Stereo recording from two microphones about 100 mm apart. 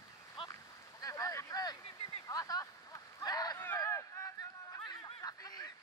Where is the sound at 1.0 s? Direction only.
35° left (ahead or behind).